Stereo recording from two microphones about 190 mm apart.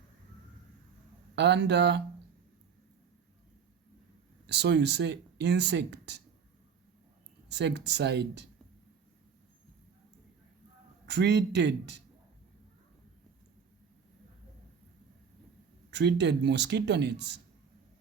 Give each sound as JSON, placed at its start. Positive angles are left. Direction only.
{"t": 1.4, "sound": "speech", "side_deg": -65}
{"t": 4.4, "sound": "speech", "side_deg": -65}
{"t": 7.4, "sound": "speech", "side_deg": -65}
{"t": 11.0, "sound": "speech", "side_deg": -65}
{"t": 15.9, "sound": "speech", "side_deg": -65}